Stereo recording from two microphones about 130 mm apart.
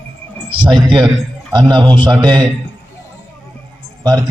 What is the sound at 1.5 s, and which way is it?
A man's voice, 35° right (ahead or behind).